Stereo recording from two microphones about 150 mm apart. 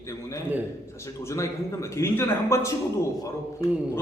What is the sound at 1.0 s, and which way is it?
A man's voice, 20° left (ahead or behind).